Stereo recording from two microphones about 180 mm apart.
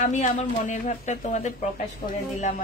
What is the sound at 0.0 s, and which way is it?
Speech, 45° left (ahead or behind).